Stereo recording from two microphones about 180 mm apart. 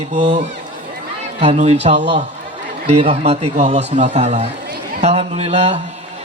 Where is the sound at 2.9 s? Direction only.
35° right (ahead or behind).